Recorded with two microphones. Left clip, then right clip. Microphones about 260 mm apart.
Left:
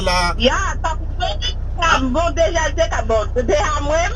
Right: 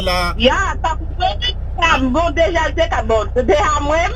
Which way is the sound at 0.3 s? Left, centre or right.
Right.